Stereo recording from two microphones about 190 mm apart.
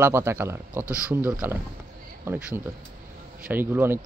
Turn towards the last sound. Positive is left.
turn(degrees=-10)  # may be behind; listen again after turning